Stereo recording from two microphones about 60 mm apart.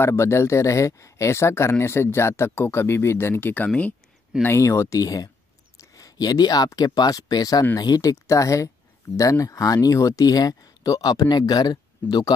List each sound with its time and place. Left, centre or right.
0.0 s speech: left
4.6 s speech: left
5.0 s speech: left
5.8 s speech: left
7.7 s speech: left